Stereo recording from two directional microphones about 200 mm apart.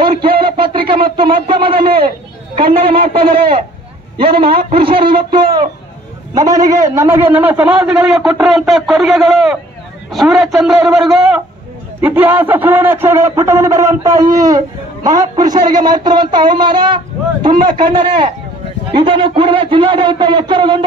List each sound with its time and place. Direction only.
0.2 s a sound: 25° right (ahead or behind)
1.1 s speech: 25° right (ahead or behind)
2.0 s chatter: 45° right (ahead or behind)
3.2 s speech: 45° right (ahead or behind)
4.6 s a man's voice: 25° right (ahead or behind)